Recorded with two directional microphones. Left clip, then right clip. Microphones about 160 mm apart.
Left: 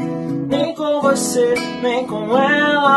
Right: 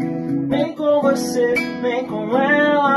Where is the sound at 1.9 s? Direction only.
25° left (ahead or behind).